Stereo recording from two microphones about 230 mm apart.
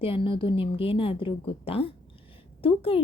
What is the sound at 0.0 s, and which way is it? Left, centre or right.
A woman's voice, left.